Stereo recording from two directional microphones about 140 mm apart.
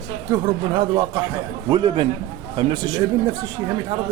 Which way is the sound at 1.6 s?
35° right (ahead or behind).